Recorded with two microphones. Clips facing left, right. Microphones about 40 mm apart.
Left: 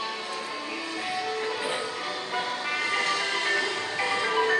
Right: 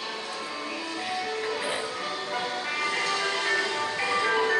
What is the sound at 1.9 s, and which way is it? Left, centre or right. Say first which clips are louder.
Music: even; left.